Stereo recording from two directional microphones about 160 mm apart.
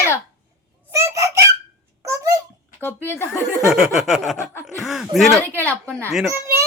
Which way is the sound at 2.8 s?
15° left (ahead or behind).